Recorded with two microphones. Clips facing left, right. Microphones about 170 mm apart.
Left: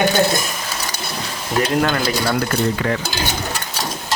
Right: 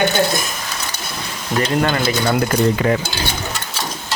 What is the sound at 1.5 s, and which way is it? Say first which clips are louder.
Speech: even; centre (ahead or behind).